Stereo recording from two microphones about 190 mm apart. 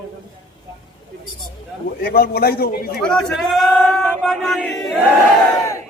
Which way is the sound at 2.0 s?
55° left (ahead or behind).